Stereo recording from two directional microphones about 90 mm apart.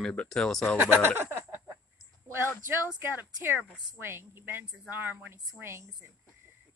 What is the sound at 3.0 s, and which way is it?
A woman's voice, 20° right (ahead or behind).